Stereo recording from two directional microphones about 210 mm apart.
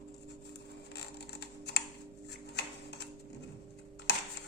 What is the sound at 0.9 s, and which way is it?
Typing, 50° left (ahead or behind).